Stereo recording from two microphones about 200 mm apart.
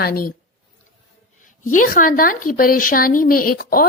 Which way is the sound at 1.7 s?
40° left (ahead or behind).